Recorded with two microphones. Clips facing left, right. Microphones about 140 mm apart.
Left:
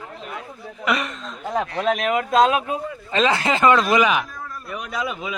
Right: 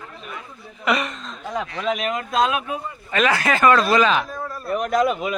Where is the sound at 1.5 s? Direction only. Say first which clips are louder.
Left 3 dB; 50° left (ahead or behind).